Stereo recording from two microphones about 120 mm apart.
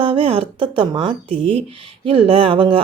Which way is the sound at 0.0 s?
50° right (ahead or behind).